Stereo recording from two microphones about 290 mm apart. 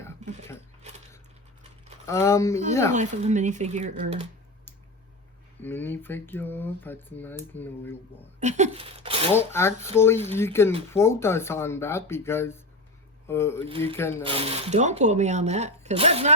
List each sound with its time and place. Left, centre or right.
0.0 s a sound: centre
2.0 s speech: centre
2.9 s speech: right
5.6 s speech: centre
8.4 s speech: right
9.3 s speech: centre
13.7 s speech: centre
13.9 s speech: centre
14.3 s speech: centre